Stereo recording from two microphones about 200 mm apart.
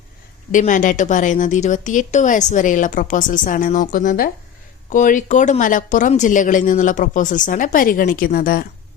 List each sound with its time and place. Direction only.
0.5 s speech: 40° left (ahead or behind)